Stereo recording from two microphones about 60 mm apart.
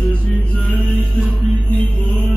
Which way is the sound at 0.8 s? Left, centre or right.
Left.